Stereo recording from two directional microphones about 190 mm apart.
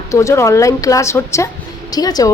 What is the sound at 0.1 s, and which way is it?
A woman's voice, 15° left (ahead or behind).